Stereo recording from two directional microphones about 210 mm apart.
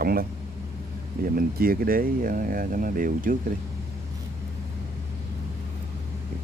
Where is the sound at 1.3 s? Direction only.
45° right (ahead or behind).